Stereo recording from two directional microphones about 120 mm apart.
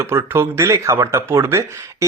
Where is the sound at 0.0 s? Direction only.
20° right (ahead or behind).